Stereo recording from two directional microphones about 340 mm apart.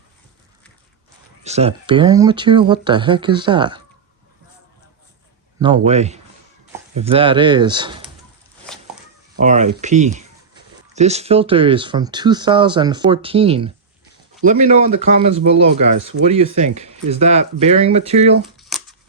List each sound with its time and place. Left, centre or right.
1.5 s speech: centre
5.5 s speech: centre
8.7 s a sound: centre
9.3 s speech: right
18.5 s shuffling cards: centre